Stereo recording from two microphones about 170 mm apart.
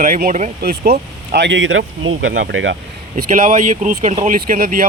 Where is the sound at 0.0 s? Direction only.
55° right (ahead or behind).